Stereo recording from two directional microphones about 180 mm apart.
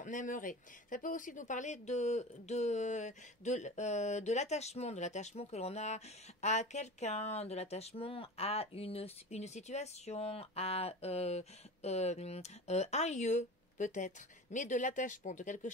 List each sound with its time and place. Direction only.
0.0 s speech: 45° left (ahead or behind)